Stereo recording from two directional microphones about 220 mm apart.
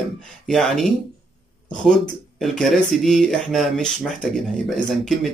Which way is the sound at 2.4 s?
Centre (ahead or behind).